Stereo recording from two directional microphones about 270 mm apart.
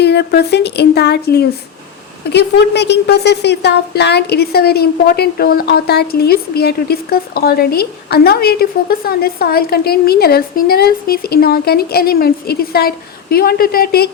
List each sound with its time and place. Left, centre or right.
0.0 s a woman's voice: left